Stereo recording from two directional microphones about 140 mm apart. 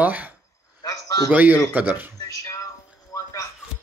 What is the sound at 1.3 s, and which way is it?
Speech, 10° right (ahead or behind).